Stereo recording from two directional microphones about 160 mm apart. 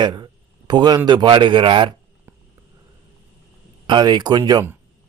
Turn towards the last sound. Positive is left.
turn(degrees=-25)  # may be behind; listen again after turning